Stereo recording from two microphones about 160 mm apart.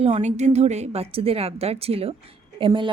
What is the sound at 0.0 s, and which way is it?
A woman's voice, 45° right (ahead or behind).